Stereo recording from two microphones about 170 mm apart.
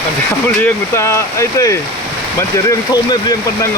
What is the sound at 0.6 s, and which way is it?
Speech, 15° left (ahead or behind).